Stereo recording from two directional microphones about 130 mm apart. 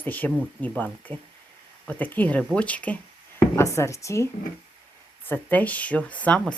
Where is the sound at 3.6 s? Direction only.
25° left (ahead or behind).